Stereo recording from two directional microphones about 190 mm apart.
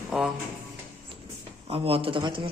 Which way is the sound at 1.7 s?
30° right (ahead or behind).